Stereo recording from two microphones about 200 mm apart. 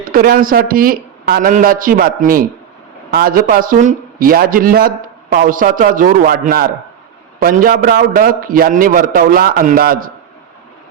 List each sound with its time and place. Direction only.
0.0 s a man's voice: 45° right (ahead or behind)